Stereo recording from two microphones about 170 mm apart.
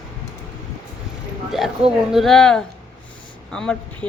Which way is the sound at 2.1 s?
Centre (ahead or behind).